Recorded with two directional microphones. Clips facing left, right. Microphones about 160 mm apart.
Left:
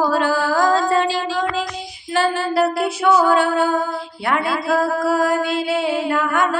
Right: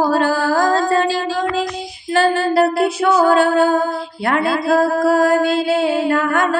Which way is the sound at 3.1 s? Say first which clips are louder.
Right 5 dB; 40° right (ahead or behind).